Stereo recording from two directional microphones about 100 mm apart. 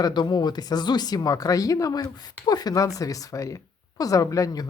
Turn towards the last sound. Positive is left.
turn(degrees=35)  # may be behind; listen again after turning